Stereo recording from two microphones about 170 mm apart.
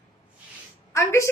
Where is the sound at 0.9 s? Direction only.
15° left (ahead or behind).